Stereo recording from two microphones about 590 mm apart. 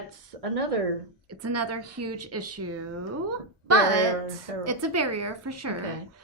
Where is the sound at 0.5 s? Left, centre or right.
Right.